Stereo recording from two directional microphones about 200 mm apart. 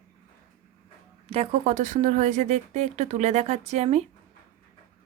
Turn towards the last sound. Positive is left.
turn(degrees=-35)  # may be behind; listen again after turning